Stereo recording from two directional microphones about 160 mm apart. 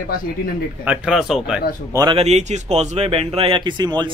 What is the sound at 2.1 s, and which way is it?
Speech, 40° right (ahead or behind).